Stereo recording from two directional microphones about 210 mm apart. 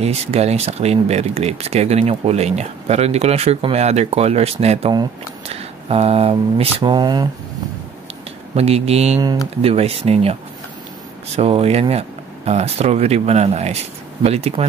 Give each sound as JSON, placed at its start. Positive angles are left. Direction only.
{"t": 0.0, "sound": "speech", "side_deg": -30}
{"t": 8.5, "sound": "speech", "side_deg": -30}
{"t": 11.3, "sound": "speech", "side_deg": -30}